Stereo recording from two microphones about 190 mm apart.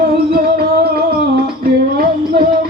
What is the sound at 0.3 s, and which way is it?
Music, 50° right (ahead or behind).